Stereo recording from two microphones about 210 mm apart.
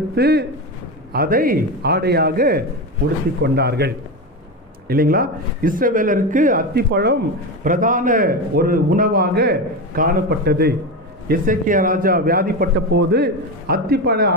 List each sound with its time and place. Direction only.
0.1 s a man's voice: 50° right (ahead or behind)
7.6 s a man's voice: 40° right (ahead or behind)